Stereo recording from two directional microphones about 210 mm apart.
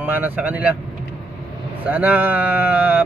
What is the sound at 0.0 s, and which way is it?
Speech, 10° right (ahead or behind).